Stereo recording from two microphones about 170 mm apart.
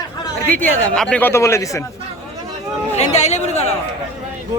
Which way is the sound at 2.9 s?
40° left (ahead or behind).